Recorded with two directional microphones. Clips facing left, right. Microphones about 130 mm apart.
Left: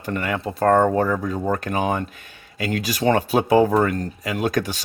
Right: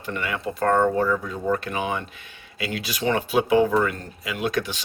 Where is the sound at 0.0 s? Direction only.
45° left (ahead or behind).